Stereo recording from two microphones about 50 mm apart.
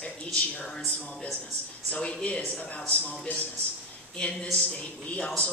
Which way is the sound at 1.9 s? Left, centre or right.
Centre.